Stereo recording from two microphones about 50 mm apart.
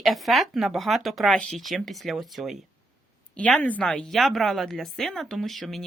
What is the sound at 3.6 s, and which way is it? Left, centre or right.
Speech, left.